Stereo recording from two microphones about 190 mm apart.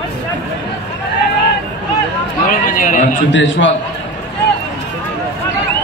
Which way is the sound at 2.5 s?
45° left (ahead or behind).